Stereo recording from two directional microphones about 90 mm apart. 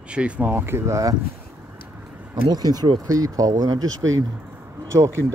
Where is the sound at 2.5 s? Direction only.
50° right (ahead or behind).